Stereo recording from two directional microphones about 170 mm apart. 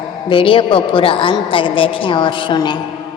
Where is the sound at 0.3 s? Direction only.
30° left (ahead or behind).